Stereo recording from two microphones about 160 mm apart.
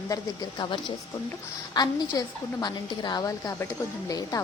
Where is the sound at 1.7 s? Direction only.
25° left (ahead or behind).